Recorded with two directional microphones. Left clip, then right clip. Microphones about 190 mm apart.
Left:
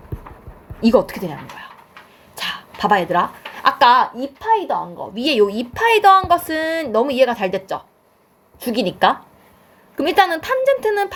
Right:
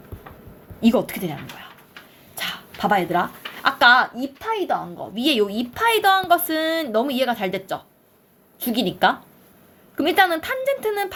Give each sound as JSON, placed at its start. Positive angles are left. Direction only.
{"t": 0.9, "sound": "a woman's voice", "side_deg": 20}